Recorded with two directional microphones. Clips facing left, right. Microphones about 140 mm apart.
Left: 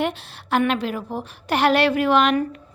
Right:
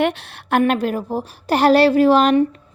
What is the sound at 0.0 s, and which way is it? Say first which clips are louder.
Speech: right 5 dB; 70° right (ahead or behind).